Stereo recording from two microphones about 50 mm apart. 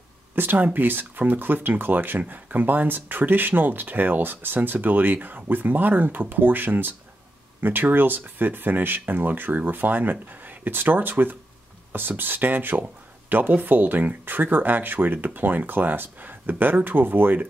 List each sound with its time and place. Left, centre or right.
0.4 s speech: right